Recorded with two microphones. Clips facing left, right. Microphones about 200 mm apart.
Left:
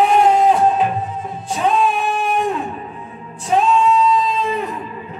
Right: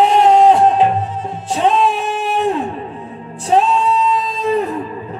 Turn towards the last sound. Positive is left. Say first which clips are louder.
# right 4 dB
turn(degrees=-35)  # may be behind; listen again after turning